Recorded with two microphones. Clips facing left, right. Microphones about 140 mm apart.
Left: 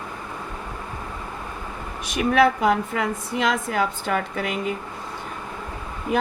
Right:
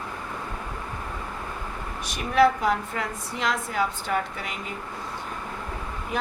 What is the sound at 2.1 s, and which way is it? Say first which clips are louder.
A woman's voice: left 2 dB; 65° left (ahead or behind).